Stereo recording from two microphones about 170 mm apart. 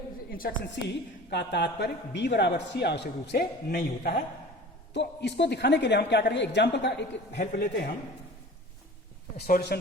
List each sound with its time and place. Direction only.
0.3 s a woman's voice: 55° left (ahead or behind)
0.8 s a woman's voice: 90° left
1.3 s a man's voice: 80° left
4.9 s a woman's voice: 90° left
7.3 s speech: 75° left (ahead or behind)
9.5 s speech: 65° left (ahead or behind)